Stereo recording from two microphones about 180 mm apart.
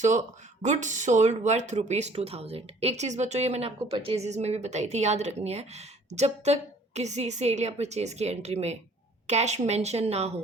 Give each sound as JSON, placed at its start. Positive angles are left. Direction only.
{"t": 0.0, "sound": "speech", "side_deg": -40}